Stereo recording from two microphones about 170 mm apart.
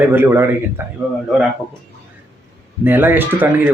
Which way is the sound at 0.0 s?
15° right (ahead or behind).